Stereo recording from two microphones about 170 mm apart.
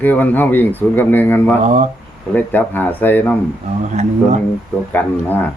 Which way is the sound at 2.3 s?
10° left (ahead or behind).